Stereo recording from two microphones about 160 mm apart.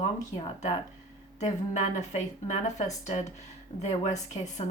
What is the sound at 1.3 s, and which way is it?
Speech, 45° left (ahead or behind).